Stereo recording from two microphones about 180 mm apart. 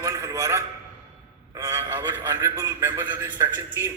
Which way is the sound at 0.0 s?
15° right (ahead or behind).